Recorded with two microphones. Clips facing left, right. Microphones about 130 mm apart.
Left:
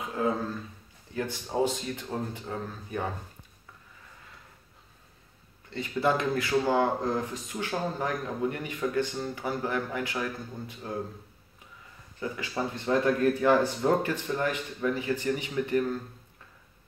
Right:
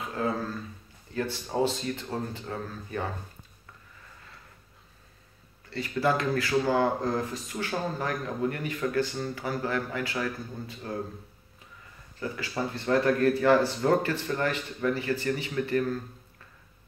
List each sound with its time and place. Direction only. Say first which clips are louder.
0.0 s a sound: left 1 dB; 15° left (ahead or behind)
1.1 s speech: even; 15° left (ahead or behind)
5.7 s speech: even; 20° left (ahead or behind)
12.2 s speech: even; 15° left (ahead or behind)